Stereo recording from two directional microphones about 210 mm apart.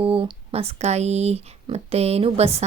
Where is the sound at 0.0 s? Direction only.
25° right (ahead or behind).